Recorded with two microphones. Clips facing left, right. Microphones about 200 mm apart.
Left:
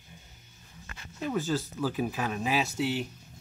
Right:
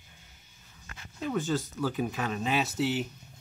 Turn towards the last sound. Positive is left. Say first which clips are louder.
# even
turn(degrees=0)  # may be behind; listen again after turning